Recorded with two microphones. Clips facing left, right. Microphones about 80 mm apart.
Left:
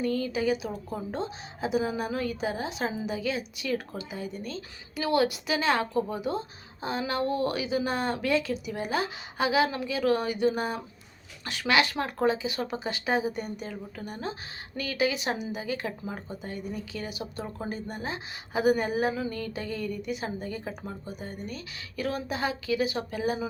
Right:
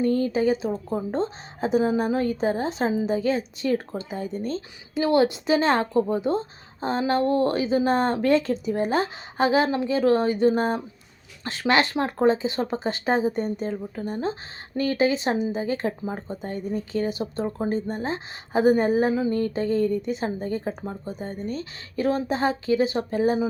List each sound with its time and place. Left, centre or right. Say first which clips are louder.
0.0 s speech: right 6 dB; right